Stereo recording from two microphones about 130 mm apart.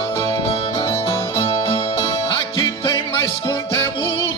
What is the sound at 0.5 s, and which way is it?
Music, 50° left (ahead or behind).